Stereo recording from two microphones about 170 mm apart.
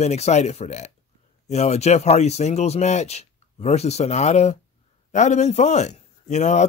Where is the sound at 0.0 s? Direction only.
40° left (ahead or behind).